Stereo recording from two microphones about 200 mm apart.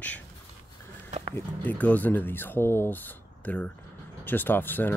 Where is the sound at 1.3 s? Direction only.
10° left (ahead or behind).